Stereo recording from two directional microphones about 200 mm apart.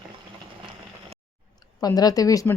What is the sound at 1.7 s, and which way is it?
Speech, 20° left (ahead or behind).